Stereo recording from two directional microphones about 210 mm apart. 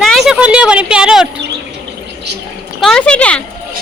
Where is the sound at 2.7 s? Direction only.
Centre (ahead or behind).